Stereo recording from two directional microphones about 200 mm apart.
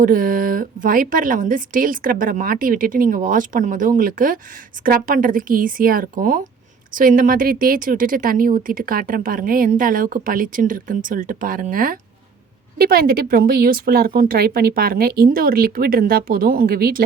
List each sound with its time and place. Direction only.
0.0 s speech: 40° right (ahead or behind)